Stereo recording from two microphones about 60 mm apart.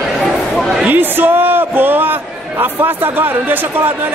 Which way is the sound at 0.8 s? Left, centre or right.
Right.